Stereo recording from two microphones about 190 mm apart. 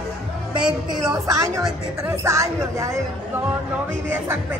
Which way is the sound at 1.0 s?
20° right (ahead or behind).